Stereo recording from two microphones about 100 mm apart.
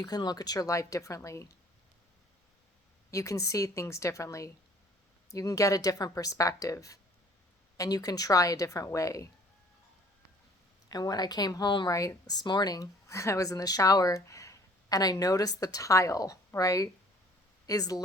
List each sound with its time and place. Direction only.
0.0 s speech: 40° left (ahead or behind)
3.1 s speech: 30° left (ahead or behind)
10.8 s speech: 40° left (ahead or behind)
11.9 s speech: 35° left (ahead or behind)